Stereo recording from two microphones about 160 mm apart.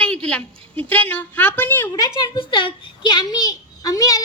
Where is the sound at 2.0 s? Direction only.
30° left (ahead or behind).